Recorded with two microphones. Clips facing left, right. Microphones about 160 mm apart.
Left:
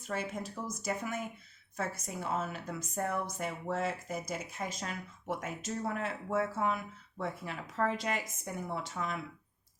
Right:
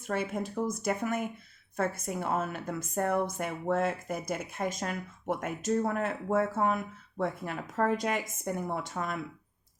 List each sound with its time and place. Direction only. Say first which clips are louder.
0.1 s a woman's voice: right 5 dB; 55° right (ahead or behind)